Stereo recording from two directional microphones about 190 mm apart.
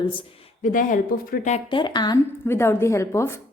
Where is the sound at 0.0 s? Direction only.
25° left (ahead or behind).